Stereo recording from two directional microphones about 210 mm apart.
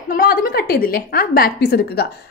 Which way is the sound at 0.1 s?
45° left (ahead or behind).